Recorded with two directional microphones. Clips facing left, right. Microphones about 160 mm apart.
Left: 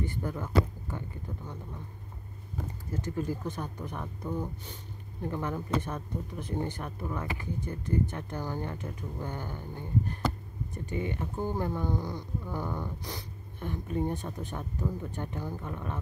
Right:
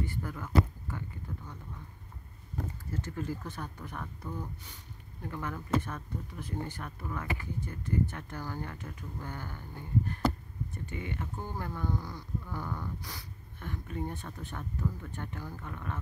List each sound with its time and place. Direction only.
0.0 s speech: 20° left (ahead or behind)
2.9 s speech: 15° left (ahead or behind)